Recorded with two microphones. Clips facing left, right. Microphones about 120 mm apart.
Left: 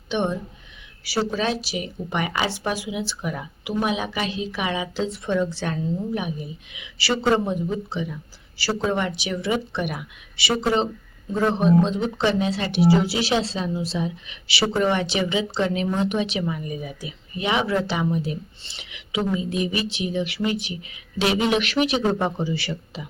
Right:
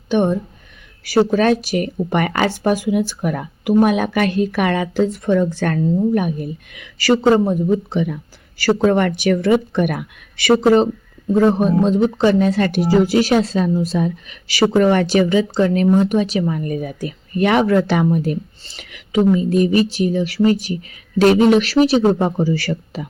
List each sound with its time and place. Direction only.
0.1 s speech: 45° right (ahead or behind)
7.9 s speech: 60° right (ahead or behind)
11.9 s speech: 40° right (ahead or behind)